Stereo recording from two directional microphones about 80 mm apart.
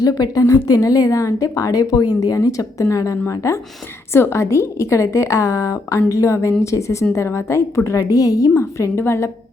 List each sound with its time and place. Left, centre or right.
0.0 s a woman's voice: left
7.9 s a woman's voice: left
8.5 s a woman's voice: left